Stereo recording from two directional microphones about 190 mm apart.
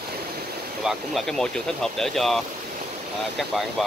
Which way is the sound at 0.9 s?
Centre (ahead or behind).